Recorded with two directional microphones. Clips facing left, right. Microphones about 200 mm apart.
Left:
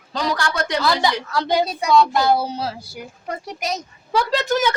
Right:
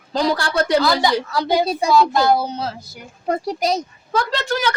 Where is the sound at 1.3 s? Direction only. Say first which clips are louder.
Right 1 dB; 5° right (ahead or behind).